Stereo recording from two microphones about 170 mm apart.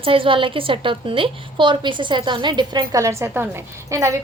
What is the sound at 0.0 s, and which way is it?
A woman's voice, 30° right (ahead or behind).